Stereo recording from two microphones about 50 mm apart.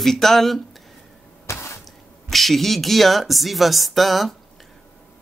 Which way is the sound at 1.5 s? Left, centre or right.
Left.